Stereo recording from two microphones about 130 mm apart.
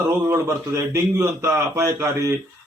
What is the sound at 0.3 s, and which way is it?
A man's voice, 20° right (ahead or behind).